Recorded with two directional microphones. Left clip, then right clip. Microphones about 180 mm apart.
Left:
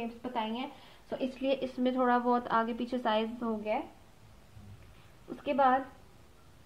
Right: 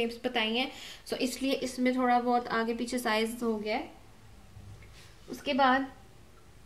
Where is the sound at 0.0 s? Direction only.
5° left (ahead or behind).